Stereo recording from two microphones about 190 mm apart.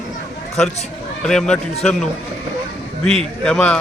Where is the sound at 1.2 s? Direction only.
5° left (ahead or behind).